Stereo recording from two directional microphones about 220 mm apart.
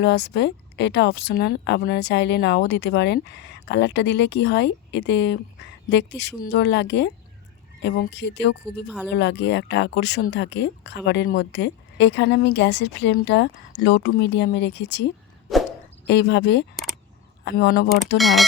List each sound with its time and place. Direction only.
0.0 s a woman's voice: 50° left (ahead or behind)
18.2 s speech: centre (ahead or behind)